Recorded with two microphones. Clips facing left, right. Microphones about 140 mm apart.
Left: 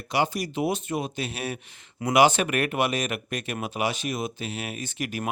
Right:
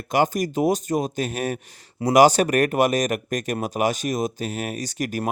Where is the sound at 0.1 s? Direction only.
45° right (ahead or behind).